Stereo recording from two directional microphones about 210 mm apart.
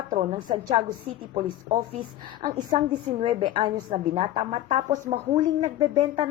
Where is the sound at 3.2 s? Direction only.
25° right (ahead or behind).